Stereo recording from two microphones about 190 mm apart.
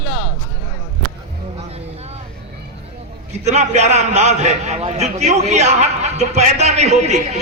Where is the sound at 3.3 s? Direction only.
35° right (ahead or behind).